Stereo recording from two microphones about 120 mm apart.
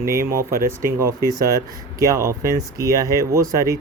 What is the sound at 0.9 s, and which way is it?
Speech, 25° right (ahead or behind).